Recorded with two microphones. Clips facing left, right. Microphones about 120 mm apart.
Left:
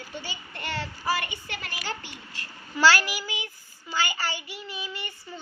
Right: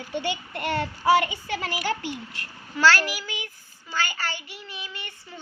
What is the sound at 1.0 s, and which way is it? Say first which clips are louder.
Child singing: right 10 dB; 85° right.